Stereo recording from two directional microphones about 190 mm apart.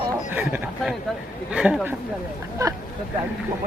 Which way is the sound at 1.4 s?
5° right (ahead or behind).